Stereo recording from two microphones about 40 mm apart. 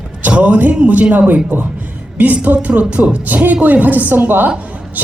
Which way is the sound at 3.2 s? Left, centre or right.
Right.